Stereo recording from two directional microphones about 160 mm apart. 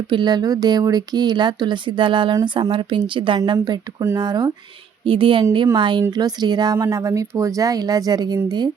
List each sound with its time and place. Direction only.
0.1 s a woman's voice: 30° right (ahead or behind)